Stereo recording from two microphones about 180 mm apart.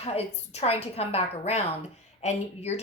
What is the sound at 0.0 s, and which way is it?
A woman's voice, 35° left (ahead or behind).